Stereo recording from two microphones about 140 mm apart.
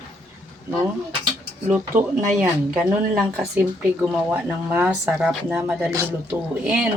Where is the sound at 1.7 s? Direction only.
5° right (ahead or behind).